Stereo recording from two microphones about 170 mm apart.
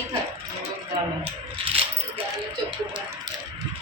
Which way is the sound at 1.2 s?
35° right (ahead or behind).